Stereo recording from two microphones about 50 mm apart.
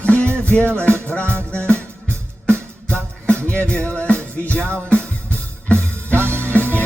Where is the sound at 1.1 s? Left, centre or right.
Left.